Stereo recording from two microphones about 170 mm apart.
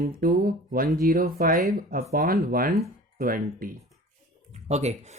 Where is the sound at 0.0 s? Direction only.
60° right (ahead or behind).